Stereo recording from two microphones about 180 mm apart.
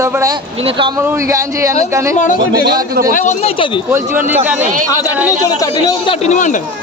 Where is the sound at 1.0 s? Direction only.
15° right (ahead or behind).